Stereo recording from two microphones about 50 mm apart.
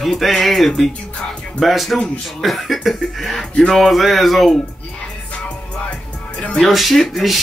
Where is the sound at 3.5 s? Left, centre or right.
Centre.